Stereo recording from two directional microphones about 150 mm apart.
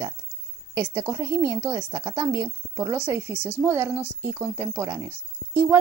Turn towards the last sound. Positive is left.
turn(degrees=-20)  # may be behind; listen again after turning